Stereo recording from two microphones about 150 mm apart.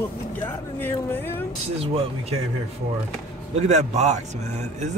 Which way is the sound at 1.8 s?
40° right (ahead or behind).